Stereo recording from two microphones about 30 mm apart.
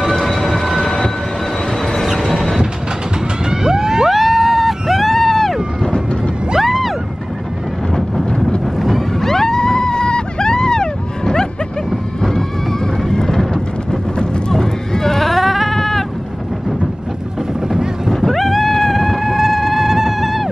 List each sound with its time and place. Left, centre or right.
0.1 s train: centre
2.1 s train: centre
3.4 s vehicle: right
4.1 s vehicle: centre
5.1 s a sound: centre
6.6 s music: centre
8.7 s boat: centre
9.1 s vehicle: centre
11.9 s dog: centre
13.1 s a sound: centre
14.5 s sheep: centre
15.4 s sheep: centre
18.1 s a sound: centre